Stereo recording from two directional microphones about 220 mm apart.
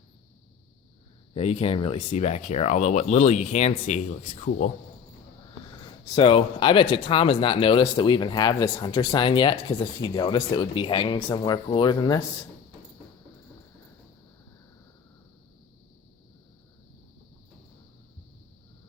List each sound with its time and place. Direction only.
1.3 s speech: 30° left (ahead or behind)
6.1 s speech: 25° left (ahead or behind)